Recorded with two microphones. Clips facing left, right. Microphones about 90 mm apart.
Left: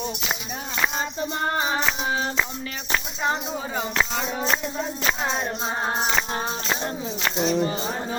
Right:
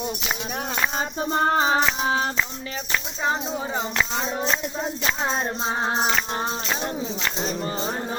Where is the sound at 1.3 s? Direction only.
35° right (ahead or behind).